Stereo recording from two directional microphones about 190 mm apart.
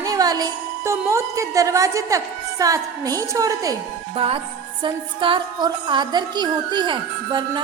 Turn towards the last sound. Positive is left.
turn(degrees=-25)  # may be behind; listen again after turning